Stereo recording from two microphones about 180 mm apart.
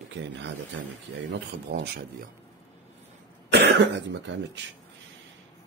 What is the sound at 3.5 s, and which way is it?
Speech, 75° right (ahead or behind).